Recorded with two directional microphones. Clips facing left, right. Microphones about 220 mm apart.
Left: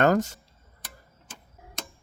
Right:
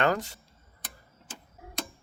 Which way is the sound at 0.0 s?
45° left (ahead or behind).